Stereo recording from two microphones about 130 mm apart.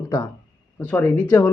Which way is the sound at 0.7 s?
15° left (ahead or behind).